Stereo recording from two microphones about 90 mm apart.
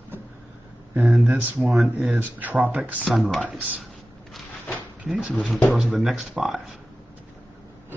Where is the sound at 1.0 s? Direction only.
Centre (ahead or behind).